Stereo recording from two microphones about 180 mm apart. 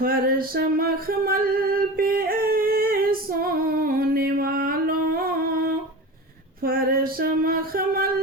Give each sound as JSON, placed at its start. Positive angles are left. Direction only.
{"t": 0.0, "sound": "singing", "side_deg": -55}
{"t": 6.6, "sound": "female singing", "side_deg": -55}